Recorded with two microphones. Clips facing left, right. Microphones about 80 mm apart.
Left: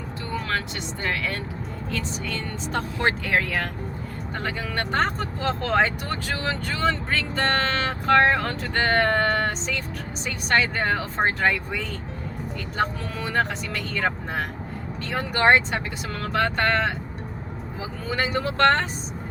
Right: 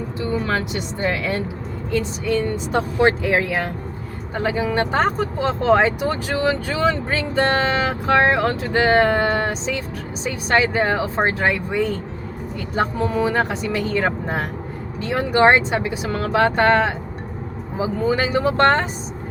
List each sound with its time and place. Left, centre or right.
1.0 s speech: centre